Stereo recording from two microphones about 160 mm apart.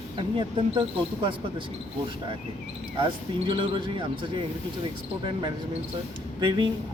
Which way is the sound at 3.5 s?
30° right (ahead or behind).